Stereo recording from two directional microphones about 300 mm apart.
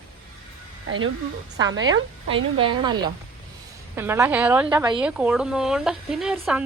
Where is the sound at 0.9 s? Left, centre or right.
Right.